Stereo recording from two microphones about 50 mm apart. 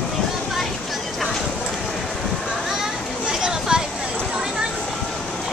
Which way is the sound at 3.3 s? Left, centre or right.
Centre.